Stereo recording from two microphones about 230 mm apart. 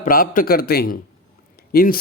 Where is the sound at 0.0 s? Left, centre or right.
Left.